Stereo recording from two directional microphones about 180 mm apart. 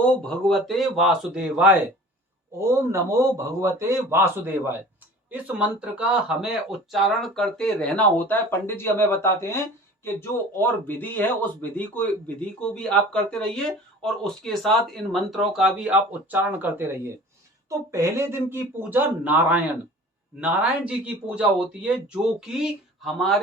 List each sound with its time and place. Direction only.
0.1 s speech: 5° left (ahead or behind)
2.6 s a man's voice: 15° right (ahead or behind); by 23.4 s centre (ahead or behind)